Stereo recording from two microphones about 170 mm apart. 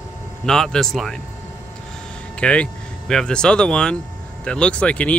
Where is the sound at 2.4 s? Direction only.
5° left (ahead or behind).